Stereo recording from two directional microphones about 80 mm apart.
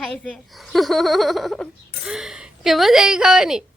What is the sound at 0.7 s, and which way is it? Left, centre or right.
Giggle, centre.